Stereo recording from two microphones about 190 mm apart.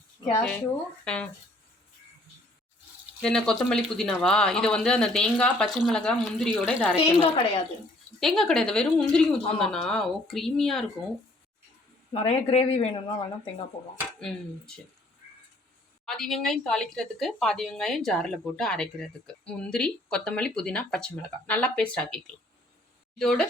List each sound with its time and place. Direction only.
1.0 s speech: 5° left (ahead or behind)
3.2 s speech: 5° left (ahead or behind)
7.2 s a woman's voice: 30° left (ahead or behind)
8.2 s speech: centre (ahead or behind)
12.1 s speech: 30° left (ahead or behind)
16.0 s speech: centre (ahead or behind)